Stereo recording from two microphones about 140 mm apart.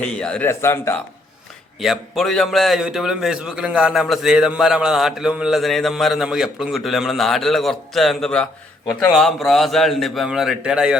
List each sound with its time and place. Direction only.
0.0 s a man's voice: 5° left (ahead or behind)
1.8 s a man's voice: centre (ahead or behind)